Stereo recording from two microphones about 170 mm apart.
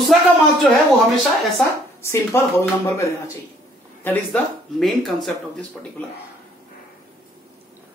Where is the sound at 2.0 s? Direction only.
15° left (ahead or behind).